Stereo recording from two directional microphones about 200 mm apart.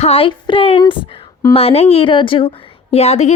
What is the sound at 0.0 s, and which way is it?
A woman's voice, 30° left (ahead or behind).